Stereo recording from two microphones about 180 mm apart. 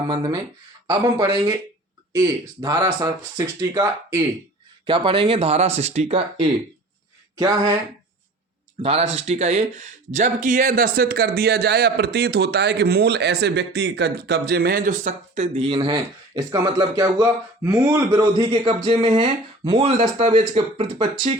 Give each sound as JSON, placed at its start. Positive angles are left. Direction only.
{"t": 0.1, "sound": "speech", "side_deg": -25}
{"t": 7.3, "sound": "speech", "side_deg": -20}
{"t": 8.8, "sound": "speech", "side_deg": -35}
{"t": 20.0, "sound": "speech", "side_deg": -35}